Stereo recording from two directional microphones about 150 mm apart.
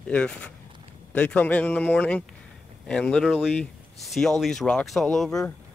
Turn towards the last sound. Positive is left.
turn(degrees=0)  # may be behind; listen again after turning